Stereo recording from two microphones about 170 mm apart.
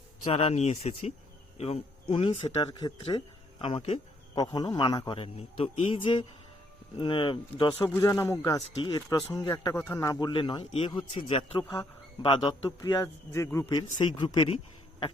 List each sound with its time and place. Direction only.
0.3 s speech: 35° left (ahead or behind)
2.6 s speech: 25° left (ahead or behind)
4.4 s speech: 20° left (ahead or behind)
7.7 s speech: 10° left (ahead or behind); by 12.5 s 30° left (ahead or behind)
12.6 s speech: 20° left (ahead or behind)